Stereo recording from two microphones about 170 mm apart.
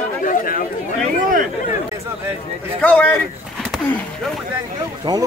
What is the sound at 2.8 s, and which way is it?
Speech, 10° left (ahead or behind).